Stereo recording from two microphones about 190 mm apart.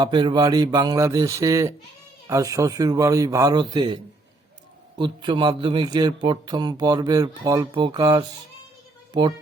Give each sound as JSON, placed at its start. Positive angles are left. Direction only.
{"t": 0.0, "sound": "a man's voice", "side_deg": -25}